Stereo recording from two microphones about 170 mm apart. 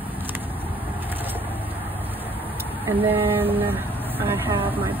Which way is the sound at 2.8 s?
15° right (ahead or behind).